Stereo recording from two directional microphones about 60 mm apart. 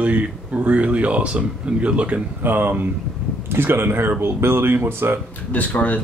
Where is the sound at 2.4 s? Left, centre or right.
Right.